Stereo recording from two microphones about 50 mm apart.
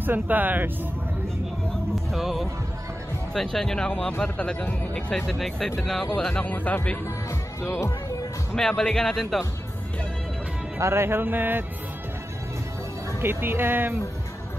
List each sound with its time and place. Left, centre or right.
0.0 s speech: right
2.0 s speech: centre; by 5.0 s left
5.1 s speech: centre
6.0 s speech: centre
6.5 s speech: left
7.2 s speech: left
8.5 s speech: centre
10.8 s music: right
11.1 s speech: right
13.2 s speech: right